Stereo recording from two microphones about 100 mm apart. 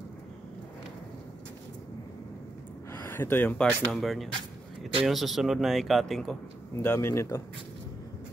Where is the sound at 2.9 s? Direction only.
20° left (ahead or behind).